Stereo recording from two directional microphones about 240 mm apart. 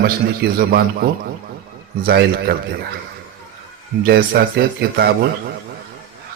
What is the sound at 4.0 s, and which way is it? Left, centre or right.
A man's voice, right.